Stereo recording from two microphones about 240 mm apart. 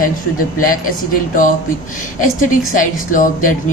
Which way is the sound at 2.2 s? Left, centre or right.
Left.